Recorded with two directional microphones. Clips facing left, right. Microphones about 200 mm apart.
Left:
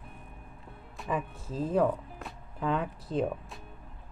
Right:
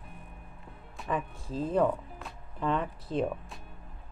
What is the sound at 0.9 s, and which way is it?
Speech, centre (ahead or behind).